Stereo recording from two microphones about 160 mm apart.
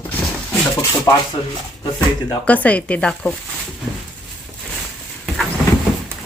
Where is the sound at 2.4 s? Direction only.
10° left (ahead or behind).